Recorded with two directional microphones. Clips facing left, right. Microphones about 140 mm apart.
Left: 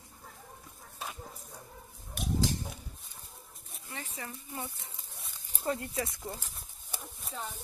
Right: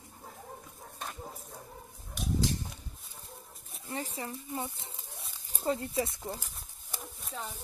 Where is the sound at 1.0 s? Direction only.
5° left (ahead or behind).